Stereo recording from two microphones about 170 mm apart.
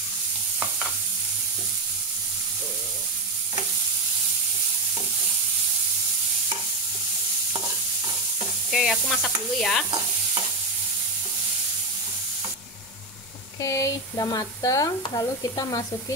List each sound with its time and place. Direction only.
8.6 s sizzle: centre (ahead or behind)
13.6 s speech: 20° left (ahead or behind)